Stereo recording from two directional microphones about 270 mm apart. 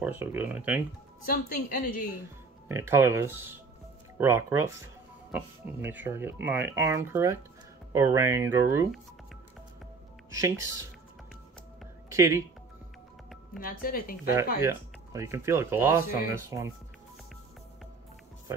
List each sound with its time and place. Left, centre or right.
0.0 s speech: centre
1.2 s a woman's voice: left
2.7 s speech: centre
12.1 s speech: centre
13.6 s a woman's voice: left
14.6 s speech: centre